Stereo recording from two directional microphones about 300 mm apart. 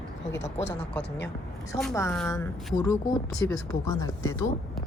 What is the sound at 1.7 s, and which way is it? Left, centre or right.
A woman's voice, centre.